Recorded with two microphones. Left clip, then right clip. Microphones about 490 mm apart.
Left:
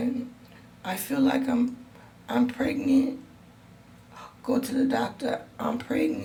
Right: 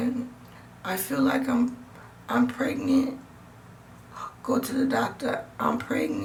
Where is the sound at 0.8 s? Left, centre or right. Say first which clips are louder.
Even; left.